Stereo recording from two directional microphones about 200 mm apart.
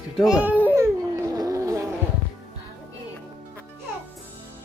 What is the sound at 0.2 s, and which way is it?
Speech, 5° right (ahead or behind).